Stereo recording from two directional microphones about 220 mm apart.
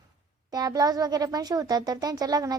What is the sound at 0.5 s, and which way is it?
A child's voice, 15° right (ahead or behind).